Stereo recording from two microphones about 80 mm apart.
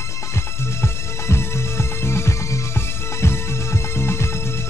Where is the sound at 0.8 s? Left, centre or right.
Left.